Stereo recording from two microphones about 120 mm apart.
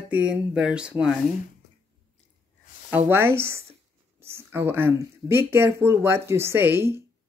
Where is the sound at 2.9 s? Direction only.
20° right (ahead or behind).